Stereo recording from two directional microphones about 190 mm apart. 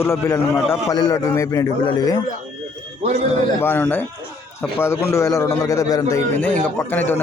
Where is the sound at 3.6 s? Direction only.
10° left (ahead or behind).